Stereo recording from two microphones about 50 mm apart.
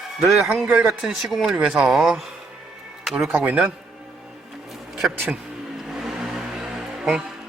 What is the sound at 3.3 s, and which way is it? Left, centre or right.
Speech, right.